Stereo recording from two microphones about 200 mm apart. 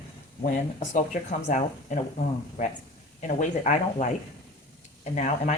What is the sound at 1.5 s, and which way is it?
Speech, 40° left (ahead or behind).